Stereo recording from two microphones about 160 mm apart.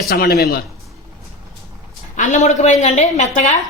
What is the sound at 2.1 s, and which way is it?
A woman's voice, 50° left (ahead or behind).